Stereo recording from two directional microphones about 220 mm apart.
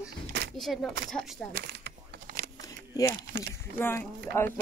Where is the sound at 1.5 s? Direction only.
45° right (ahead or behind).